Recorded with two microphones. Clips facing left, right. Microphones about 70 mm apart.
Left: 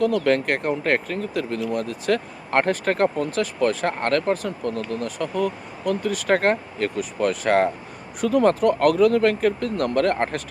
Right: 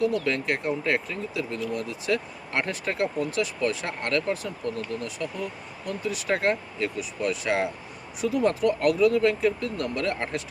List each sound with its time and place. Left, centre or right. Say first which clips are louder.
0.0 s speech: left 5 dB; left